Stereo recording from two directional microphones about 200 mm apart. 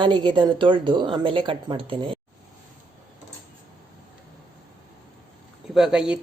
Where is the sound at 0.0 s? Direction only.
25° right (ahead or behind).